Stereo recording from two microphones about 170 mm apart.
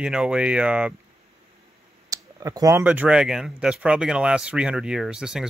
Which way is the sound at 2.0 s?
20° right (ahead or behind).